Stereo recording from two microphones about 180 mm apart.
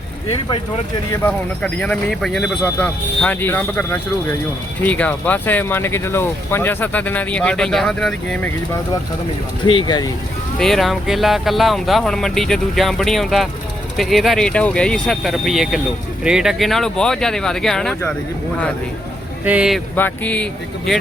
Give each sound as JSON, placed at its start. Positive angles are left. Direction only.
{"t": 0.3, "sound": "speech", "side_deg": 30}
{"t": 1.1, "sound": "speech", "side_deg": 10}
{"t": 9.6, "sound": "speech", "side_deg": 25}
{"t": 10.6, "sound": "speech", "side_deg": 0}
{"t": 19.5, "sound": "speech", "side_deg": -5}
{"t": 20.0, "sound": "speech", "side_deg": 10}